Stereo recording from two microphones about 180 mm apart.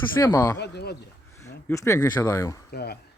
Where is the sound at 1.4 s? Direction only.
15° left (ahead or behind).